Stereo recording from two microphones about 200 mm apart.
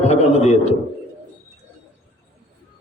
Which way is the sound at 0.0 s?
30° left (ahead or behind).